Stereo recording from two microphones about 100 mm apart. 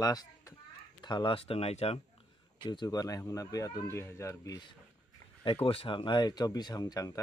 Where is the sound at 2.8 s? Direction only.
35° left (ahead or behind).